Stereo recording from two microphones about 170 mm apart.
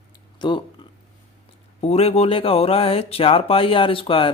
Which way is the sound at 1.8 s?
40° left (ahead or behind).